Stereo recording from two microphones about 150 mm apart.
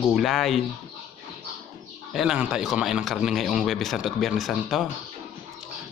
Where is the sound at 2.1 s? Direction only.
5° right (ahead or behind).